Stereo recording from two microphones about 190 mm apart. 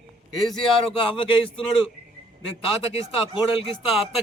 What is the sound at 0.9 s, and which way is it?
Speech, 30° left (ahead or behind).